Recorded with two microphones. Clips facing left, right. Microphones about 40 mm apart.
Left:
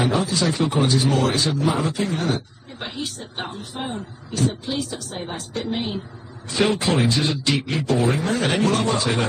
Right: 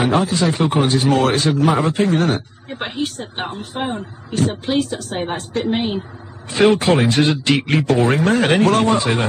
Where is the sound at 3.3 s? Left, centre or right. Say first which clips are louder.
Right 5 dB; right.